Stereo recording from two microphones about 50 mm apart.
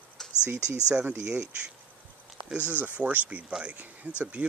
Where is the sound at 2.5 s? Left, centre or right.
Right.